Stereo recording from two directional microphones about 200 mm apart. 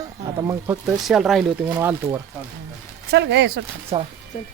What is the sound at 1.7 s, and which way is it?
Speech, 15° right (ahead or behind).